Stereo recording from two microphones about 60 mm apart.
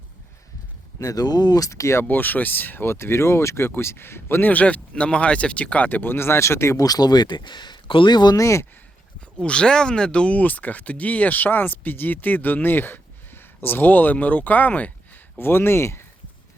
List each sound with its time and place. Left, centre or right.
0.9 s speech: left
2.0 s speech: left
6.8 s speech: left
8.4 s speech: left
9.4 s speech: centre
15.4 s speech: left